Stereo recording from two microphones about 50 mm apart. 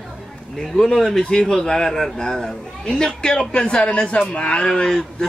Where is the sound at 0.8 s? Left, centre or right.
Centre.